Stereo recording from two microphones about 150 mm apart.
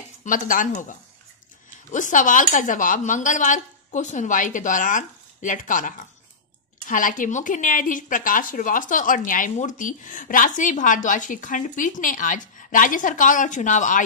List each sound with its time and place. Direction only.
0.2 s speech: 65° left (ahead or behind)